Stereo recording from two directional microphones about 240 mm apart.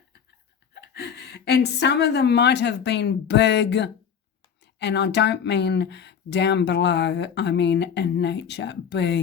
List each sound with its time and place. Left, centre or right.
0.7 s speech: left